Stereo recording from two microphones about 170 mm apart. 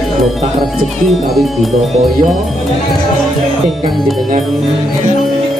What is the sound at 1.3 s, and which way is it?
Speech, centre (ahead or behind).